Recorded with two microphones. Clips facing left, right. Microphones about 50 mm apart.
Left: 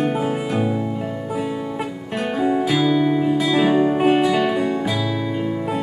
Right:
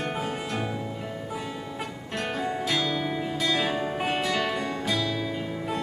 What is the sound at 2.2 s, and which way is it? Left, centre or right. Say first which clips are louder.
Music: left 9 dB; centre.